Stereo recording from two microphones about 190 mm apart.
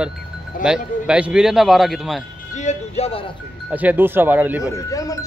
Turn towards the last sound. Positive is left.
turn(degrees=15)  # may be behind; listen again after turning